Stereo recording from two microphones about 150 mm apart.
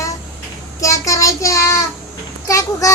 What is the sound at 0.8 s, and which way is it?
Child singing, 20° left (ahead or behind).